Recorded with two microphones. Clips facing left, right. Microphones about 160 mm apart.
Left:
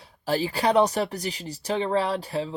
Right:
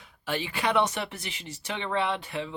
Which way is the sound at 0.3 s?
35° left (ahead or behind).